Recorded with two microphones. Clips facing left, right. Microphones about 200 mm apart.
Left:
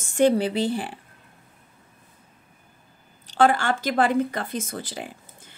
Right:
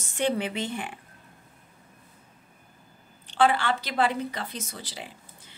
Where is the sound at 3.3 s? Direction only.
45° left (ahead or behind).